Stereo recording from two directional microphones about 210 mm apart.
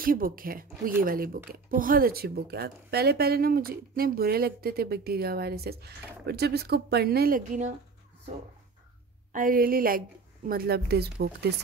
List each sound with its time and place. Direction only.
0.0 s speech: 45° right (ahead or behind)
9.3 s speech: 40° right (ahead or behind)